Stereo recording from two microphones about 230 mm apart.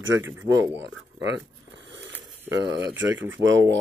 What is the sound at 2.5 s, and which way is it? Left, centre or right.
Speech, right.